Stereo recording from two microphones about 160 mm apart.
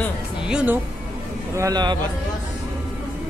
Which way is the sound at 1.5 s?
20° right (ahead or behind).